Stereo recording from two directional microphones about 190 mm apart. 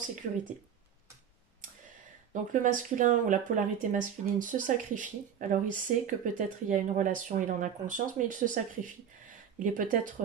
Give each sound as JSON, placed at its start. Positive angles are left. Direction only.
{"t": 2.3, "sound": "speech", "side_deg": -45}